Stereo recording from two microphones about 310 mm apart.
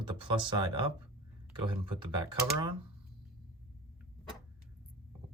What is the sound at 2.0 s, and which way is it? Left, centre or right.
Speech, centre.